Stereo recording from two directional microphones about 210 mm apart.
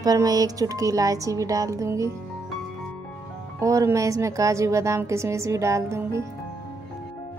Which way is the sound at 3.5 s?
15° right (ahead or behind).